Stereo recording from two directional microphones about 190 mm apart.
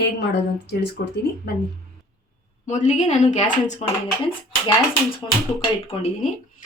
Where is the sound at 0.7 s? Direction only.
60° left (ahead or behind).